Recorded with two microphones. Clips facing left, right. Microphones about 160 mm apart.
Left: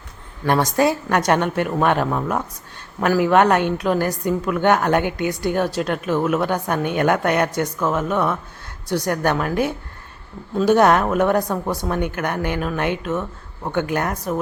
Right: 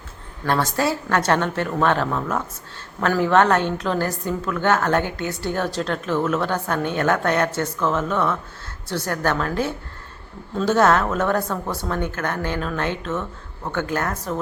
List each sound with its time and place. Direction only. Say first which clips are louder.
0.4 s a woman's voice: left 4 dB; 15° left (ahead or behind)